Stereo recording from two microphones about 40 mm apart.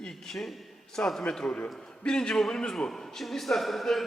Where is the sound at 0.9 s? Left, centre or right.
Centre.